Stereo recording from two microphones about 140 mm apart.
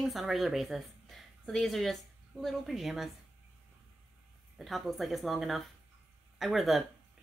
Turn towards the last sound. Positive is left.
turn(degrees=0)  # may be behind; listen again after turning